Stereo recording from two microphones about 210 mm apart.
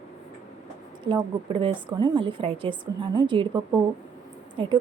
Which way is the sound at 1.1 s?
25° right (ahead or behind).